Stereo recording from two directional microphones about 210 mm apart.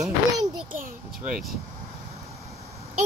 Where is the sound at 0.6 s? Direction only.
40° right (ahead or behind).